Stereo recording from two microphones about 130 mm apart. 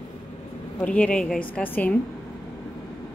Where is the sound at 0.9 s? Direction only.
10° left (ahead or behind).